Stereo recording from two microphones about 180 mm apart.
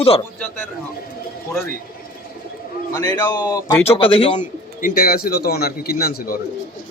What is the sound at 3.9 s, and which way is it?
Speech, 30° left (ahead or behind).